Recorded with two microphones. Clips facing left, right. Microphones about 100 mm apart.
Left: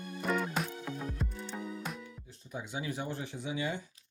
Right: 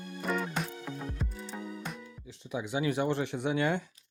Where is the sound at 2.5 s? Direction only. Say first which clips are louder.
Right 7 dB; 75° right (ahead or behind).